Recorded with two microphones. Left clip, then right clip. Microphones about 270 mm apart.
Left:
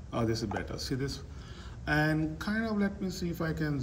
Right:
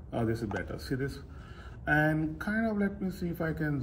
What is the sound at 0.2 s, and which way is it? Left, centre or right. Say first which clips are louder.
Speech: left 1 dB; centre.